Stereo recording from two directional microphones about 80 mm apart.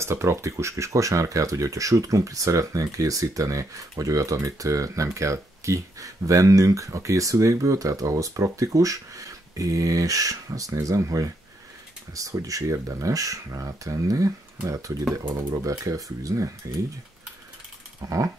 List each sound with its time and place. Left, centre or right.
0.0 s speech: right
18.0 s speech: right